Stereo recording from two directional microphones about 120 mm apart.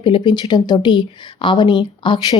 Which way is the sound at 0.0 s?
40° left (ahead or behind).